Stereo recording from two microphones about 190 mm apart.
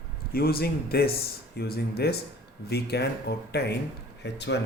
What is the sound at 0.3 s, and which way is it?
Speech, 55° left (ahead or behind).